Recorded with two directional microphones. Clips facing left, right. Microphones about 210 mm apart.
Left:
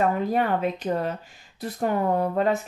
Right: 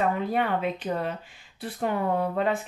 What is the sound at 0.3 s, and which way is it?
Speech, 40° left (ahead or behind).